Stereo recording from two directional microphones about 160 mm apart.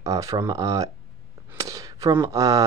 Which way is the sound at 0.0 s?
20° right (ahead or behind).